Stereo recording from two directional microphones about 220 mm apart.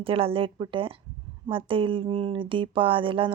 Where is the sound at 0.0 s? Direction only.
25° right (ahead or behind).